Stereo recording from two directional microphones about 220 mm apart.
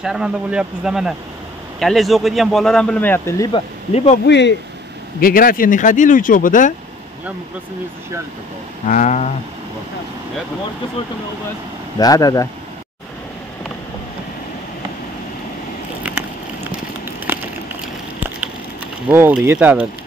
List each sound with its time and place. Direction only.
0.0 s speech: 5° right (ahead or behind)
3.5 s speech: 30° left (ahead or behind)
4.3 s speech: 50° left (ahead or behind)
5.2 s speech: 40° left (ahead or behind)
8.8 s speech: 35° left (ahead or behind)
12.0 s speech: 15° left (ahead or behind)
19.0 s speech: 10° right (ahead or behind)